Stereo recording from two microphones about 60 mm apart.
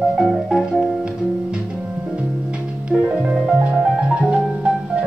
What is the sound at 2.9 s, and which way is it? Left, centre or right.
Music, centre.